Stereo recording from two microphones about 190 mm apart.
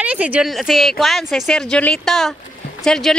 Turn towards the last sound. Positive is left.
turn(degrees=5)  # may be behind; listen again after turning